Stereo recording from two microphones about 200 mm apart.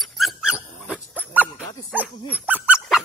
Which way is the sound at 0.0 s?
Centre (ahead or behind).